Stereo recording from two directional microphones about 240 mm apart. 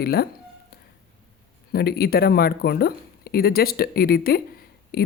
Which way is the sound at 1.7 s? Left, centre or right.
Left.